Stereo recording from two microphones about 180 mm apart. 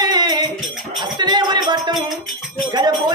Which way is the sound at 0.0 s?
25° right (ahead or behind).